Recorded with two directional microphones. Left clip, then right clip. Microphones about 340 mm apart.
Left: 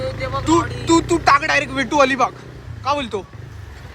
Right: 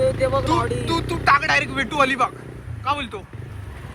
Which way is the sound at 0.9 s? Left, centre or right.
Centre.